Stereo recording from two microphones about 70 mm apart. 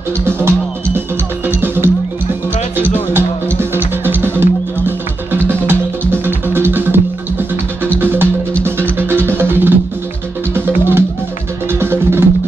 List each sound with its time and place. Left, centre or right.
1.5 s music: right